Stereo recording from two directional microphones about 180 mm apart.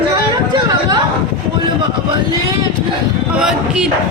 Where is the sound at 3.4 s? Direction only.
5° right (ahead or behind).